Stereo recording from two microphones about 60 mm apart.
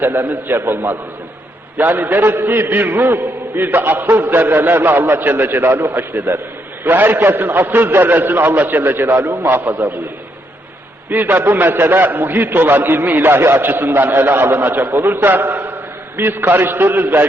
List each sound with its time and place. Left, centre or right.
0.0 s a man's voice: right
11.1 s a man's voice: right